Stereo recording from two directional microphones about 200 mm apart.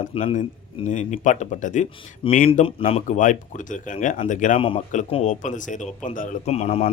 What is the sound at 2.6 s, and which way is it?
A man's voice, 30° left (ahead or behind).